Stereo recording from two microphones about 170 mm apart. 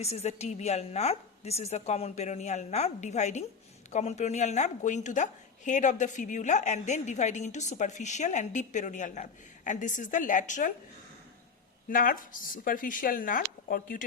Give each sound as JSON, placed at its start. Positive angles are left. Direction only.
{"t": 0.0, "sound": "a woman's voice", "side_deg": 40}
{"t": 11.9, "sound": "a woman's voice", "side_deg": 55}